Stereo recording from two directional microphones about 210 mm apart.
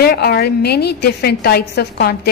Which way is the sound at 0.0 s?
50° left (ahead or behind).